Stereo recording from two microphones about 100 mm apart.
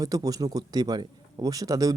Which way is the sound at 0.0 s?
35° right (ahead or behind).